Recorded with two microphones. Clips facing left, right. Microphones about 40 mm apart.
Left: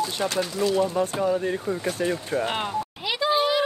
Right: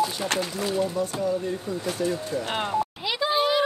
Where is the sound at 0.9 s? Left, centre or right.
Left.